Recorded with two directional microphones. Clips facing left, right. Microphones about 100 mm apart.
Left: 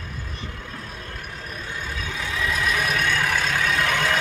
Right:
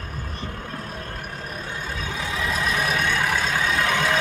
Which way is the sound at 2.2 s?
25° right (ahead or behind).